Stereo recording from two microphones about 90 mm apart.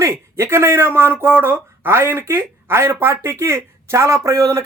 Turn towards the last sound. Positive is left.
turn(degrees=-35)  # may be behind; listen again after turning